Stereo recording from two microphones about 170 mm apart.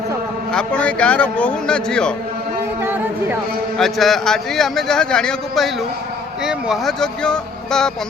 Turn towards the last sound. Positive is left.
turn(degrees=5)  # may be behind; listen again after turning